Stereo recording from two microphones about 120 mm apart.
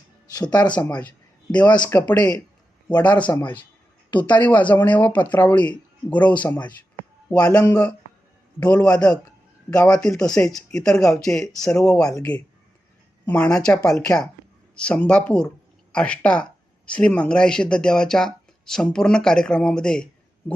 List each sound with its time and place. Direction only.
0.3 s speech: 35° left (ahead or behind)
0.8 s speech: 10° left (ahead or behind)
13.2 s speech: 10° left (ahead or behind)